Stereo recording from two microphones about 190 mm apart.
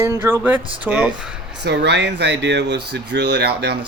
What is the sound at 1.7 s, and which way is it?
Speech, 65° right (ahead or behind).